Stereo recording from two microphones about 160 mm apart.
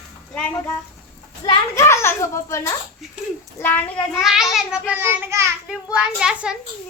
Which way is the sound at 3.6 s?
10° left (ahead or behind).